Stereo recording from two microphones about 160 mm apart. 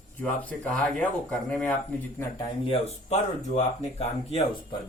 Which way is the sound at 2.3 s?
30° left (ahead or behind).